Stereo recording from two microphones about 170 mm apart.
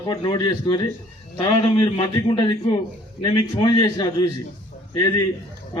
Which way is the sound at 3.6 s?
25° left (ahead or behind).